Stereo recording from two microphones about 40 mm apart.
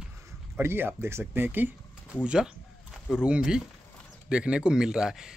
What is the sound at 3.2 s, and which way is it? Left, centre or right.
Speech, right.